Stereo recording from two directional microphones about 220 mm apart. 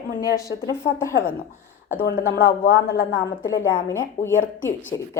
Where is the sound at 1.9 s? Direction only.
45° left (ahead or behind).